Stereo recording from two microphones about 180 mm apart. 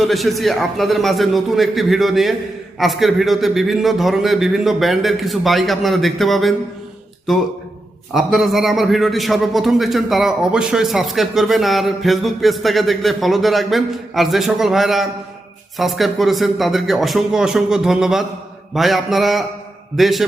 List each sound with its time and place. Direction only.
0.0 s a man's voice: centre (ahead or behind)
8.1 s a man's voice: centre (ahead or behind)